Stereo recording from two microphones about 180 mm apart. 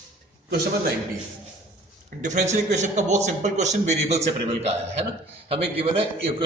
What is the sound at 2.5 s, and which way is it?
A man's voice, 40° right (ahead or behind).